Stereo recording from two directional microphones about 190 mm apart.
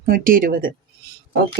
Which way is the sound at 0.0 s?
50° right (ahead or behind).